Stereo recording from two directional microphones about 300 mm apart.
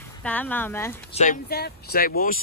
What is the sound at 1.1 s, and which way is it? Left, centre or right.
Speech, left.